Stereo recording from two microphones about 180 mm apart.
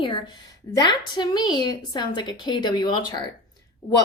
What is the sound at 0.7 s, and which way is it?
A woman's voice, 25° left (ahead or behind).